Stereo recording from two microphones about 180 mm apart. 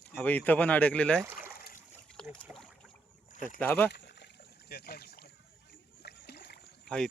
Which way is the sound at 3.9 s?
75° left (ahead or behind).